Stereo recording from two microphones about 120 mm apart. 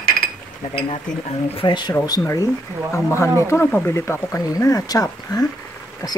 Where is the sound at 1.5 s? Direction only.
40° left (ahead or behind).